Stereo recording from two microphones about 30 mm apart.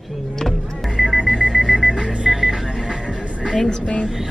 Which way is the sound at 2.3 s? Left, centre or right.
Centre.